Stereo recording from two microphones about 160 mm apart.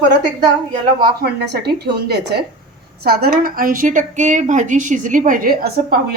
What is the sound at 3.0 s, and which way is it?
A woman's voice, 75° right (ahead or behind).